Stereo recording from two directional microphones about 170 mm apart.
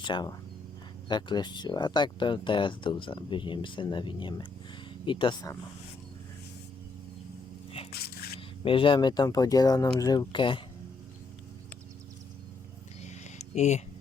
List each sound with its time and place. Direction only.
0.0 s speech: 25° left (ahead or behind)
8.4 s speech: 30° left (ahead or behind)
13.5 s speech: 40° left (ahead or behind)